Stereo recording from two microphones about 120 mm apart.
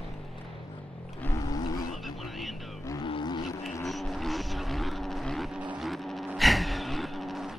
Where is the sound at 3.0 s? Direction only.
40° left (ahead or behind).